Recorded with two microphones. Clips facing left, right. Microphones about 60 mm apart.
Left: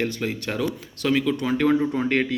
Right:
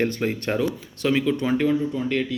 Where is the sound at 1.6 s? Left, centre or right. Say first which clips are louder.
Left 2 dB; left.